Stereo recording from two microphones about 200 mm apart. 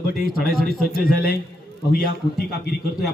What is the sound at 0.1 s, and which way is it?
A man's voice, 50° left (ahead or behind).